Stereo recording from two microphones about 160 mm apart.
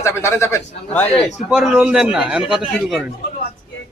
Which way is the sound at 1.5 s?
5° right (ahead or behind).